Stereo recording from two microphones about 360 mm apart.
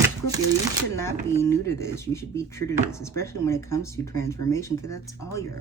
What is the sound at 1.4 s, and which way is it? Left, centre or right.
Speech, centre.